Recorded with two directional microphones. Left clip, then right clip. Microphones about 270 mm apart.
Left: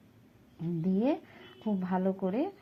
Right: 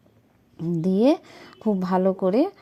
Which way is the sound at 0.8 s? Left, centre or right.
Right.